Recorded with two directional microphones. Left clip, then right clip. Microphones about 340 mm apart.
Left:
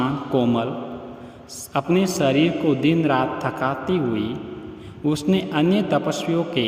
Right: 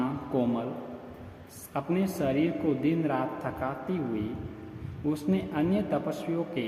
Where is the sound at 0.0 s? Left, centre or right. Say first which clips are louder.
Left 8 dB; left.